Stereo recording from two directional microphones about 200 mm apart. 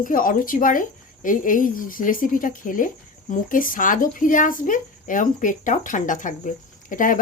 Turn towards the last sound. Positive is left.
turn(degrees=40)  # may be behind; listen again after turning